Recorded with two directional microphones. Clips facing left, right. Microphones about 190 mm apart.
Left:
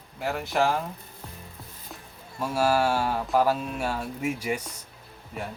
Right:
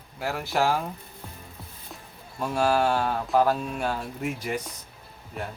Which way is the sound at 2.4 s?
5° left (ahead or behind).